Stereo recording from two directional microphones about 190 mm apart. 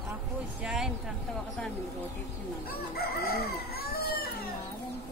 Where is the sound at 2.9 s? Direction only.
55° left (ahead or behind).